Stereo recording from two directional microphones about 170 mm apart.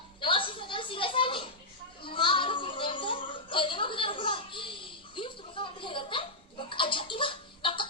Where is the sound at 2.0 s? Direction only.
30° left (ahead or behind).